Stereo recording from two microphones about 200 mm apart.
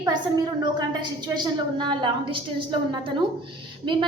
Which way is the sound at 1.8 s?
20° right (ahead or behind).